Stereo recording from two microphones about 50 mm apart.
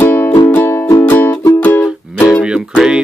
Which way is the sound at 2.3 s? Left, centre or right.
Centre.